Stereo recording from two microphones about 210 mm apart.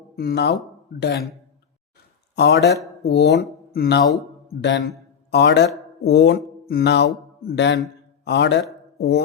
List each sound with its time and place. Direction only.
0.2 s speech: 50° left (ahead or behind)
2.3 s speech: 55° left (ahead or behind)
5.3 s a man's voice: 55° left (ahead or behind)